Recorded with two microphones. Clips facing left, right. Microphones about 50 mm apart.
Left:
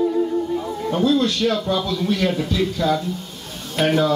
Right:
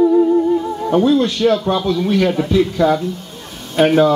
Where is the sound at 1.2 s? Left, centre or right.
Right.